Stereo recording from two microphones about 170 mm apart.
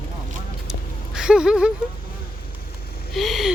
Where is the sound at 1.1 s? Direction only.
5° right (ahead or behind).